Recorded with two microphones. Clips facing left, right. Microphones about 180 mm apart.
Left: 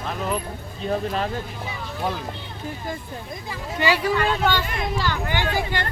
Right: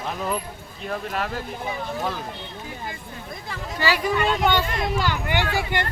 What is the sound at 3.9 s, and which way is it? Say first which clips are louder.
Speech: even; 15° right (ahead or behind).